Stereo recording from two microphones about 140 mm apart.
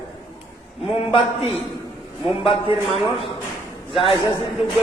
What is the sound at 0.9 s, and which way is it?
Speech, 45° left (ahead or behind).